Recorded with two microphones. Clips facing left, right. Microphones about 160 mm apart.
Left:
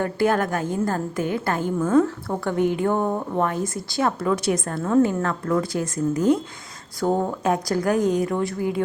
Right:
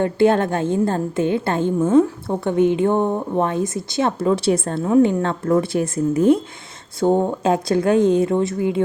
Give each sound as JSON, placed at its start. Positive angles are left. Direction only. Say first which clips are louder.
{"t": 0.0, "sound": "a woman's voice", "louder": "right 5 dB", "side_deg": -25}
{"t": 4.8, "sound": "a woman's voice", "louder": "right 3 dB", "side_deg": -15}
{"t": 5.2, "sound": "a woman's voice", "louder": "right 4 dB", "side_deg": -25}